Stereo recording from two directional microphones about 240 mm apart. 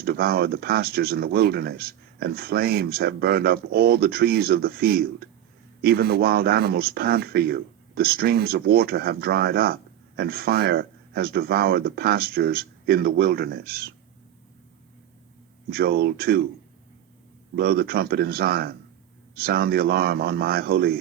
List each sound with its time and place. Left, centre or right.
0.0 s speech: right
15.7 s speech: right
17.6 s speech: right